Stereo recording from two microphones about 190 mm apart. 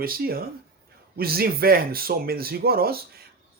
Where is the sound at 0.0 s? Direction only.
50° right (ahead or behind).